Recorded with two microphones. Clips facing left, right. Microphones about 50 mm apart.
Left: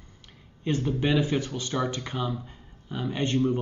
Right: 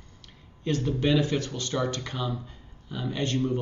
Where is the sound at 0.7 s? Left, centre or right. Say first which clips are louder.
Even; centre.